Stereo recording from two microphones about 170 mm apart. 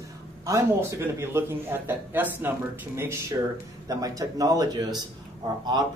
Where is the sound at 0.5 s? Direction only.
15° right (ahead or behind).